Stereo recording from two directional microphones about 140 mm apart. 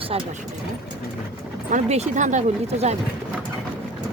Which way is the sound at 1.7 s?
60° right (ahead or behind).